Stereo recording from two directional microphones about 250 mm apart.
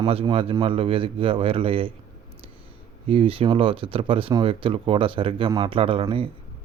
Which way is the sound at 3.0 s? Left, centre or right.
Right.